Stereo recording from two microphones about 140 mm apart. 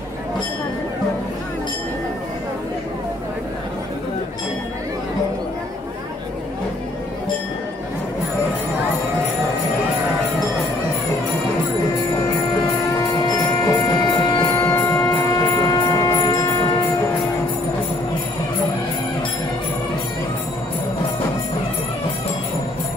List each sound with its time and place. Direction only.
13.2 s music: 25° left (ahead or behind)
14.6 s music: 15° left (ahead or behind)